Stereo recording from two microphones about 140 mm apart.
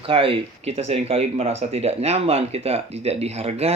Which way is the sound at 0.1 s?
40° right (ahead or behind).